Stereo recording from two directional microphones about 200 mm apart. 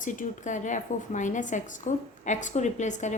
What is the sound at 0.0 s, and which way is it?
A woman's voice, 40° left (ahead or behind).